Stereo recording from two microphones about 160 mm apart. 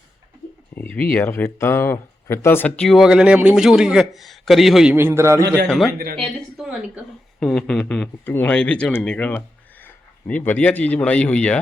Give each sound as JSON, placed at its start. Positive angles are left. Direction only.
{"t": 0.8, "sound": "speech", "side_deg": 10}
{"t": 4.9, "sound": "a man's voice", "side_deg": -15}
{"t": 5.6, "sound": "speech", "side_deg": 5}
{"t": 6.1, "sound": "a sound", "side_deg": 10}
{"t": 6.7, "sound": "a woman's voice", "side_deg": 0}